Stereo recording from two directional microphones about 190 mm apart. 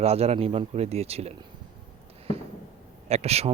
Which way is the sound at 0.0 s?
35° right (ahead or behind).